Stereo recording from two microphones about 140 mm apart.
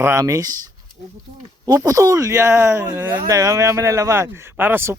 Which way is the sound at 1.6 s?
25° right (ahead or behind).